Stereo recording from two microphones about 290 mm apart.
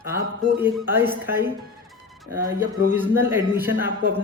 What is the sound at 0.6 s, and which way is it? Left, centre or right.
Speech, centre.